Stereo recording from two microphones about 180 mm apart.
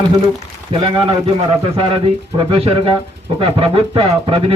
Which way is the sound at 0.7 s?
30° right (ahead or behind).